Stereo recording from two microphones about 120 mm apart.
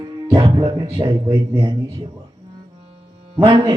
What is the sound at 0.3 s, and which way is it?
Speech, 45° right (ahead or behind).